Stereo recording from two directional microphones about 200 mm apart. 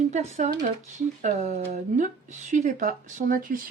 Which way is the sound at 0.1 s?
35° right (ahead or behind).